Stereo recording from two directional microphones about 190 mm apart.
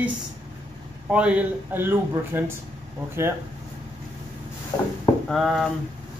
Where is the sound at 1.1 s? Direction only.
5° right (ahead or behind).